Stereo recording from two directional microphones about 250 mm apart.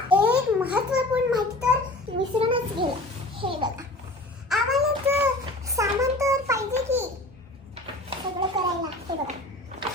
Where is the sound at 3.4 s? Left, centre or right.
Centre.